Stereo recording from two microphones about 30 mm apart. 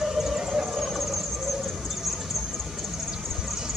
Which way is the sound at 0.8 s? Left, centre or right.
Centre.